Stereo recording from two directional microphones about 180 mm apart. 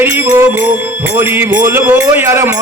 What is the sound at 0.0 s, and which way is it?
Music, 10° right (ahead or behind).